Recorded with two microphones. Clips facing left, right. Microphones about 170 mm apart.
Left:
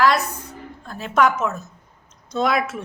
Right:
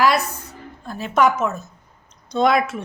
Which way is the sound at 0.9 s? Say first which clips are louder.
Right 1 dB; centre (ahead or behind).